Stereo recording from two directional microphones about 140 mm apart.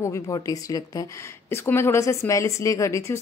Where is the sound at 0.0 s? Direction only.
25° left (ahead or behind).